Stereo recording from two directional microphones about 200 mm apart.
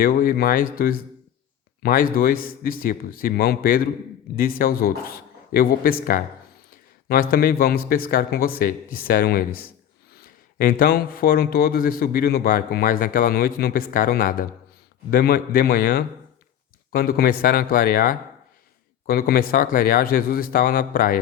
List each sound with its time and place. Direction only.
0.0 s a man's voice: 45° left (ahead or behind)
10.6 s a man's voice: 45° left (ahead or behind)